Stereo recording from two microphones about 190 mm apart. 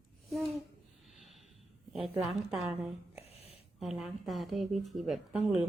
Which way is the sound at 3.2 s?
30° left (ahead or behind).